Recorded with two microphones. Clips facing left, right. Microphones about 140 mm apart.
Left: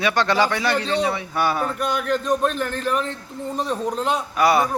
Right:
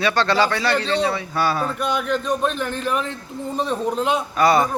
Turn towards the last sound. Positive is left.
turn(degrees=10)  # may be behind; listen again after turning